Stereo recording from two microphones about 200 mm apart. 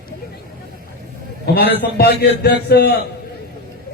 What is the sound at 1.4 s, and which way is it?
A man's voice, 50° left (ahead or behind).